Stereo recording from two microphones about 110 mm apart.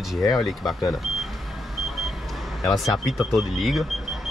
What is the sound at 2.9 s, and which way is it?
Speech, centre (ahead or behind).